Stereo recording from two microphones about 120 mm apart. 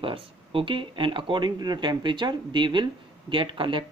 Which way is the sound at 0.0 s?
45° right (ahead or behind).